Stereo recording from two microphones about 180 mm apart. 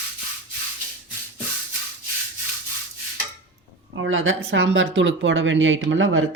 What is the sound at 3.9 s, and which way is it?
Speech, 90° right.